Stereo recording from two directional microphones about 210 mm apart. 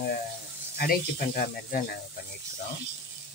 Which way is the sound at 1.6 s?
40° left (ahead or behind).